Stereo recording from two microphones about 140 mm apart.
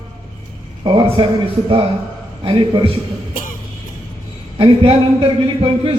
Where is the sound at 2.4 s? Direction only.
35° right (ahead or behind).